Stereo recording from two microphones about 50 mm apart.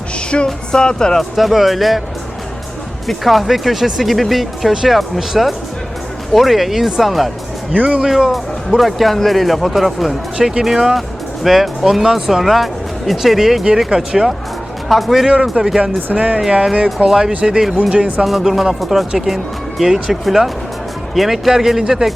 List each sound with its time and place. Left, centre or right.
0.4 s speech: centre
1.4 s speech: centre
3.1 s speech: centre
7.7 s speech: right
8.0 s speech: centre
14.8 s speech: centre
16.1 s speech: right
17.1 s speech: centre